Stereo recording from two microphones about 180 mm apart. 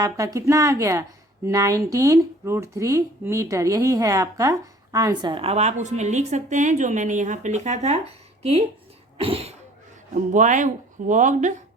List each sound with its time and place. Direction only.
0.0 s a woman's voice: 20° right (ahead or behind)
9.2 s a sound: 35° right (ahead or behind)
10.3 s speech: 45° right (ahead or behind)